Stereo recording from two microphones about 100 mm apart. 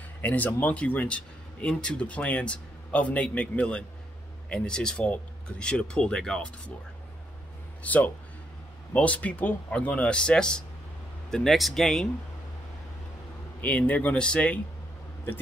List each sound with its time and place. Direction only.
0.2 s speech: 20° left (ahead or behind)
7.8 s a man's voice: 15° left (ahead or behind)
13.6 s speech: 15° left (ahead or behind)